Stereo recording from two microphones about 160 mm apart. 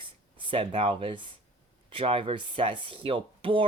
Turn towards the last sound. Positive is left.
turn(degrees=-35)  # may be behind; listen again after turning